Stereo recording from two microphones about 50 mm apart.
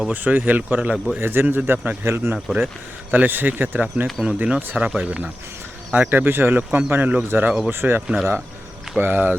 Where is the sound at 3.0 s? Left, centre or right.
Right.